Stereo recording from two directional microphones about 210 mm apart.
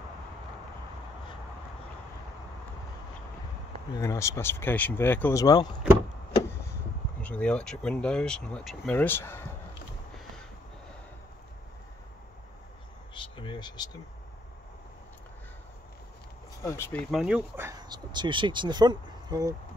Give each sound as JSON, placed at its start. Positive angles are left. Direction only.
{"t": 3.9, "sound": "speech", "side_deg": 15}
{"t": 7.2, "sound": "speech", "side_deg": 5}
{"t": 13.1, "sound": "a sound", "side_deg": 25}
{"t": 16.6, "sound": "speech", "side_deg": 10}
{"t": 17.1, "sound": "speech", "side_deg": -5}